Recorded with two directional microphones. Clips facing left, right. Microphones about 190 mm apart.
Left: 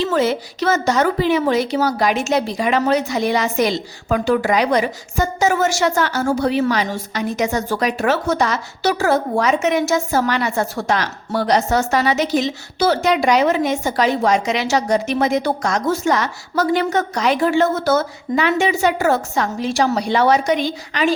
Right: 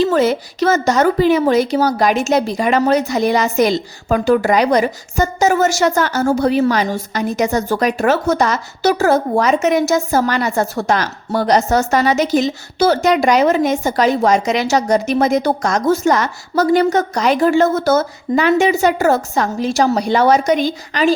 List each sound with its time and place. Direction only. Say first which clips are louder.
0.0 s a woman's voice: right 4 dB; 45° right (ahead or behind)